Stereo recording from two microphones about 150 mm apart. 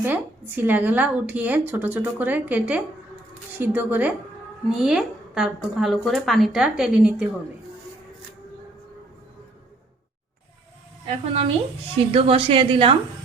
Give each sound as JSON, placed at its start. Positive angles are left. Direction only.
{"t": 0.0, "sound": "a woman's voice", "side_deg": -15}
{"t": 11.0, "sound": "a woman's voice", "side_deg": -40}